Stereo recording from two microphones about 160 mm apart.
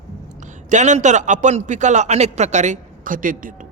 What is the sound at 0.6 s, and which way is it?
A man's voice, 50° right (ahead or behind).